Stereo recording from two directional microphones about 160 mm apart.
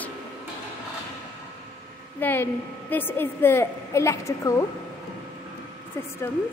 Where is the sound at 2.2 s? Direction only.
10° left (ahead or behind).